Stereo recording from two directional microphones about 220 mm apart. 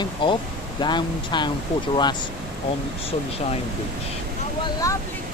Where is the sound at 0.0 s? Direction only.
20° left (ahead or behind).